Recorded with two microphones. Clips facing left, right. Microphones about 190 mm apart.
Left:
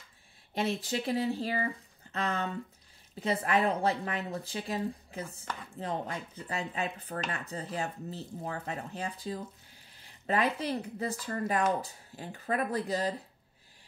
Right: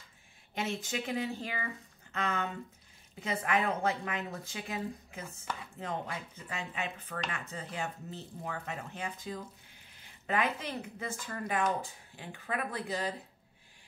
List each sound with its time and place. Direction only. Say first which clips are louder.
0.6 s speech: left 4 dB; 35° left (ahead or behind)